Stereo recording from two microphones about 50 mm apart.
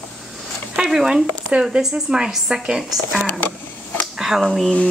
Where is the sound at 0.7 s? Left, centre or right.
Centre.